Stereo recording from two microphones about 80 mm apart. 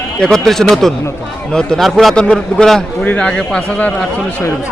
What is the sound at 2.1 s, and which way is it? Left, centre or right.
Speech, centre.